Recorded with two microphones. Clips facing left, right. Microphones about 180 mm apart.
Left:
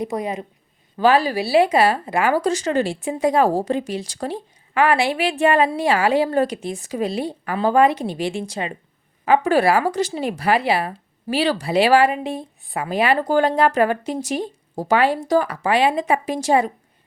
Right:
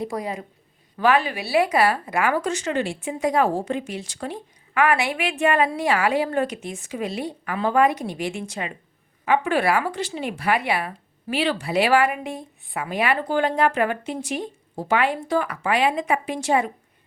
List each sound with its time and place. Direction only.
0.0 s speech: 20° left (ahead or behind)
0.9 s speech: 30° left (ahead or behind)